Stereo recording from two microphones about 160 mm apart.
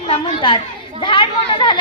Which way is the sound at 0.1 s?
30° left (ahead or behind).